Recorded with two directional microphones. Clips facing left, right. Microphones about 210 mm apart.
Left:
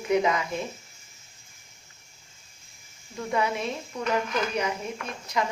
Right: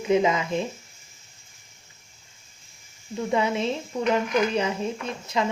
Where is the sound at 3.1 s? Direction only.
25° right (ahead or behind).